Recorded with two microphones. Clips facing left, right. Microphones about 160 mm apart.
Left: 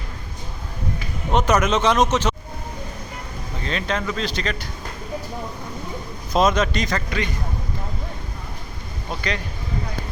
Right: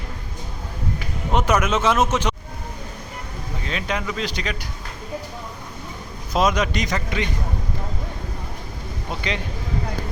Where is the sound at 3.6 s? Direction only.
10° right (ahead or behind).